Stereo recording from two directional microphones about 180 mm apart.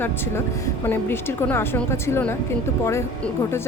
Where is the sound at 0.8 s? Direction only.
10° left (ahead or behind).